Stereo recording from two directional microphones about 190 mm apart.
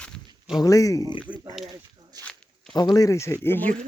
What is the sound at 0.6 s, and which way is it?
Speech, 15° left (ahead or behind).